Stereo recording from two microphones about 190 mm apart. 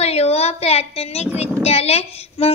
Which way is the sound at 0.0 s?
35° left (ahead or behind).